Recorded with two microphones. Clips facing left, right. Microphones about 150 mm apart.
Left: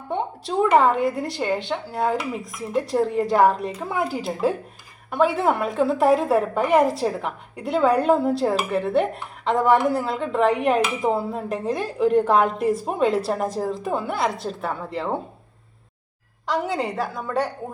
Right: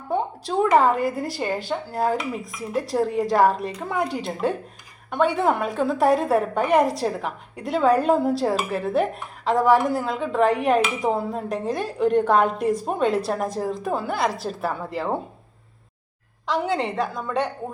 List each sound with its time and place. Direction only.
0.1 s a sound: centre (ahead or behind)
0.8 s a woman's voice: centre (ahead or behind)
16.5 s a woman's voice: centre (ahead or behind)